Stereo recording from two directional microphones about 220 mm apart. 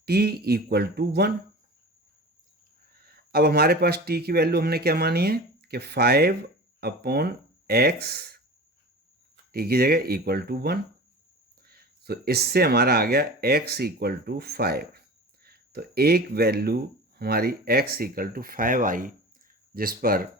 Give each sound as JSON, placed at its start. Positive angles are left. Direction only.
{"t": 0.0, "sound": "speech", "side_deg": -45}
{"t": 2.9, "sound": "speech", "side_deg": -45}
{"t": 9.5, "sound": "speech", "side_deg": -45}